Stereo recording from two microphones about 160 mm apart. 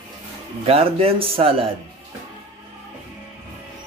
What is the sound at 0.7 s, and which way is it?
A man's voice, 40° right (ahead or behind).